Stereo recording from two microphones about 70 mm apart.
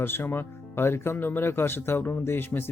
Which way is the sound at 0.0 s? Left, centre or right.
Left.